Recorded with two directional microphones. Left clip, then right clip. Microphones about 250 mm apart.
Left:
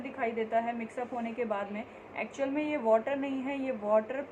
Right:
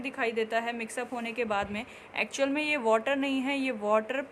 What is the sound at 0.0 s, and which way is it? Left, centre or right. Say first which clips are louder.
A woman's voice: right 3 dB; right.